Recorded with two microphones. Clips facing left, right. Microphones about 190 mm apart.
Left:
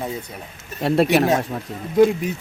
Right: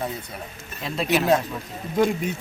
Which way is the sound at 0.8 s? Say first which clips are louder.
Left 7 dB; 60° left (ahead or behind).